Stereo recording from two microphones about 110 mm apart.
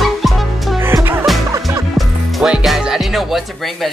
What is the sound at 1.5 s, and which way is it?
Music, 30° right (ahead or behind).